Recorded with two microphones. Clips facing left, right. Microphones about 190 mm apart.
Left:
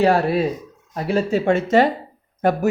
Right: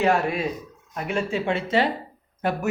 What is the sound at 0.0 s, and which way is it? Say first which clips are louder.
Speech: left 5 dB; 35° left (ahead or behind).